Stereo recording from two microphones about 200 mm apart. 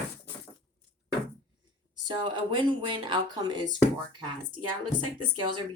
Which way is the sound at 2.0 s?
25° right (ahead or behind).